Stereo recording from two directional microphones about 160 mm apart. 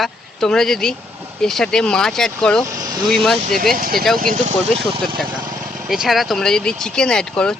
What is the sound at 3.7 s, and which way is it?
Speech, 65° right (ahead or behind).